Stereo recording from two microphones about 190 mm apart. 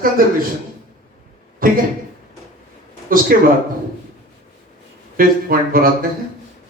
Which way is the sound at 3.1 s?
50° right (ahead or behind).